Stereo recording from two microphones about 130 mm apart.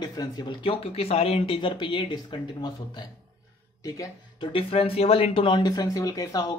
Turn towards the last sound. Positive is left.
turn(degrees=25)  # may be behind; listen again after turning